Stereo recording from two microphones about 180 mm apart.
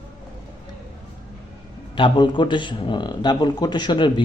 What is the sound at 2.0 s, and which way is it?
A man's voice, 25° left (ahead or behind).